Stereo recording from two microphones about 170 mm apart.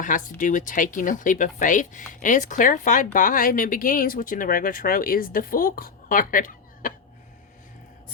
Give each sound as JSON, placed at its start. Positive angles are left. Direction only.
{"t": 0.0, "sound": "speech", "side_deg": 50}